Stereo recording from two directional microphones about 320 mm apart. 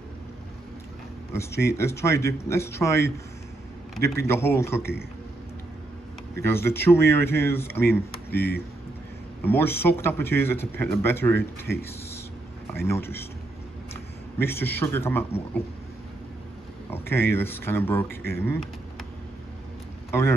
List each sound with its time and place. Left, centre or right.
1.3 s speech: centre
6.4 s speech: centre
8.4 s speech: left
9.4 s speech: centre
12.7 s speech: centre
14.4 s speech: centre
16.9 s speech: centre
20.1 s a man's voice: centre